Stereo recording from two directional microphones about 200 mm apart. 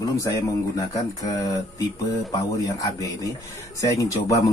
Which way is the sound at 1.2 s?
15° left (ahead or behind).